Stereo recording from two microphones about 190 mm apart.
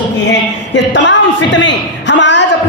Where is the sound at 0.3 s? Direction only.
70° left (ahead or behind).